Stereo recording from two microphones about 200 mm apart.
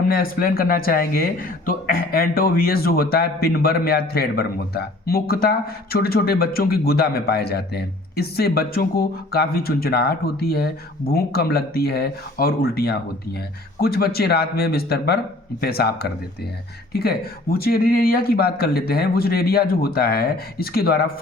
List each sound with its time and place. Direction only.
0.1 s speech: 45° left (ahead or behind)